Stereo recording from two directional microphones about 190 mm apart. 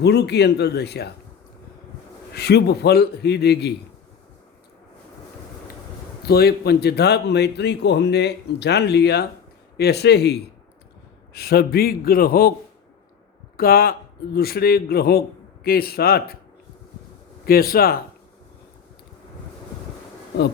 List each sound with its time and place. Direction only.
0.0 s speech: 60° left (ahead or behind)
2.3 s speech: 60° left (ahead or behind)
6.2 s speech: 55° left (ahead or behind)
11.3 s a man's voice: 55° left (ahead or behind)
13.6 s a man's voice: 50° left (ahead or behind)
17.4 s a man's voice: 50° left (ahead or behind)